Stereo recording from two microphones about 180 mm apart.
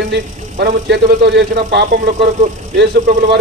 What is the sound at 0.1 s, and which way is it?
Speech, 70° right (ahead or behind).